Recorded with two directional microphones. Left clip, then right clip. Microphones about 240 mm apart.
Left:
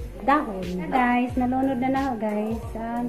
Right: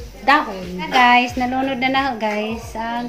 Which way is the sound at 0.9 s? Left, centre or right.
Centre.